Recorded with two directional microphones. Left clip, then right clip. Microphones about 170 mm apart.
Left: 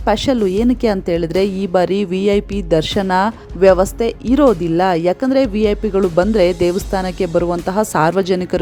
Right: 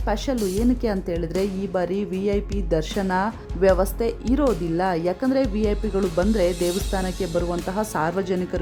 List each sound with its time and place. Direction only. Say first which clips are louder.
0.0 s a woman's voice: left 9 dB; 35° left (ahead or behind)